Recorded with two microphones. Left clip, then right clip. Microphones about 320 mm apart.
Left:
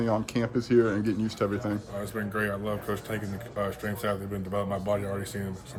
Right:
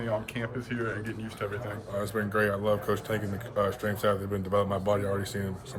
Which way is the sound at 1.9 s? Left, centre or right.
Centre.